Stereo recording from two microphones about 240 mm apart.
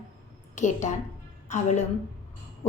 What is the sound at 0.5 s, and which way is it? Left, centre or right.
Speech, left.